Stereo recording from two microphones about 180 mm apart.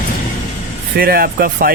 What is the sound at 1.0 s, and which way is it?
Speech, 55° right (ahead or behind).